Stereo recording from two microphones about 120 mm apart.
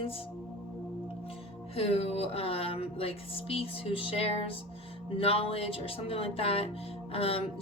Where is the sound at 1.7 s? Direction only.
55° left (ahead or behind).